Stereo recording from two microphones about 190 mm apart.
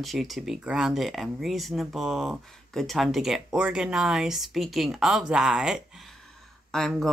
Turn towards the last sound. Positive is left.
turn(degrees=0)  # may be behind; listen again after turning